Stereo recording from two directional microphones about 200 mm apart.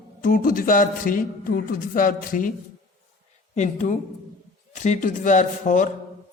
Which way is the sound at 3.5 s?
40° left (ahead or behind).